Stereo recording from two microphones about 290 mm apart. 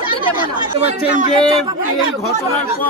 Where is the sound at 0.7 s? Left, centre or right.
Right.